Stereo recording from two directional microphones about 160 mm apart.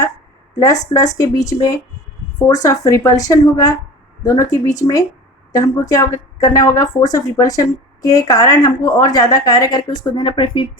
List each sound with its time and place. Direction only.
0.6 s a woman's voice: 20° left (ahead or behind)